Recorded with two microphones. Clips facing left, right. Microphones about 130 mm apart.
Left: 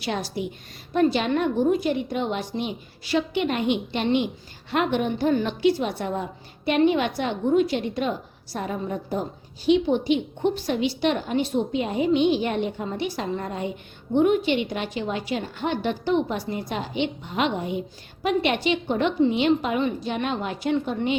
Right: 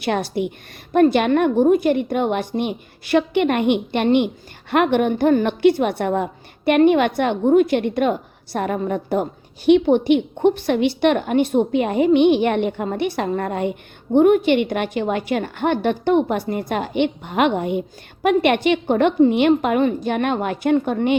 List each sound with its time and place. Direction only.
0.0 s a woman's voice: 60° right (ahead or behind)